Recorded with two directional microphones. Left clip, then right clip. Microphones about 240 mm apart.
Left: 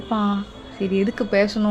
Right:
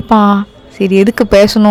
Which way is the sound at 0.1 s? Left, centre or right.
Right.